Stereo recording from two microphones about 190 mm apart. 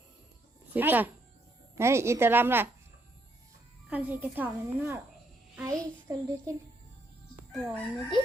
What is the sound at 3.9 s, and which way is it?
A child's voice, 10° right (ahead or behind).